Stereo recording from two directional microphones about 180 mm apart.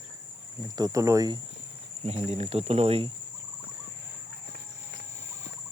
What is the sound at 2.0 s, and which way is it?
Speech, 35° right (ahead or behind).